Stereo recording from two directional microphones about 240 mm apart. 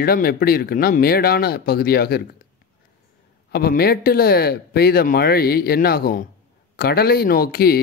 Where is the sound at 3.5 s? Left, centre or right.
Left.